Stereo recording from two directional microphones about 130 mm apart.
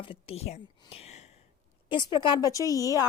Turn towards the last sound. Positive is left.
turn(degrees=25)  # may be behind; listen again after turning